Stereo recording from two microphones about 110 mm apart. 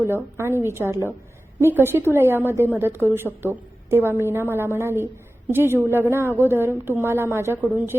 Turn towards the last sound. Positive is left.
turn(degrees=-20)  # may be behind; listen again after turning